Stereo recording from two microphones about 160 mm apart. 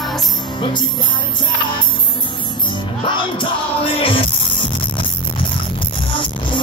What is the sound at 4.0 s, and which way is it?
Music, 35° left (ahead or behind).